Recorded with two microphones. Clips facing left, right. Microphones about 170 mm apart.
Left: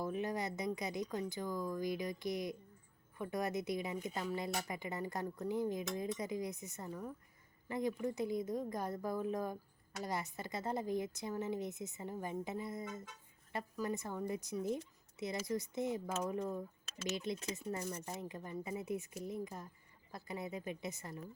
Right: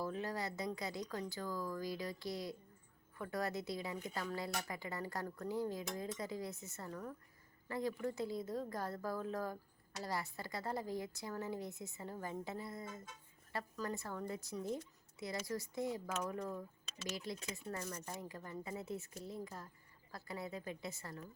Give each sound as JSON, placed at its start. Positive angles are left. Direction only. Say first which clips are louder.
{"t": 0.0, "sound": "speech", "louder": "left 3 dB", "side_deg": 20}